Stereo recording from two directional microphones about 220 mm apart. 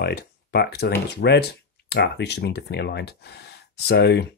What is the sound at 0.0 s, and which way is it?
Speech, 45° left (ahead or behind).